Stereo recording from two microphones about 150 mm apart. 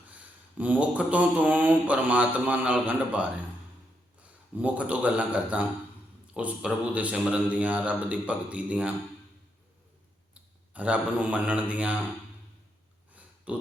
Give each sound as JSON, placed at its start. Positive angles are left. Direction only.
{"t": 0.1, "sound": "speech", "side_deg": -10}
{"t": 4.5, "sound": "speech", "side_deg": -10}
{"t": 10.3, "sound": "speech", "side_deg": -10}
{"t": 13.1, "sound": "a sound", "side_deg": -10}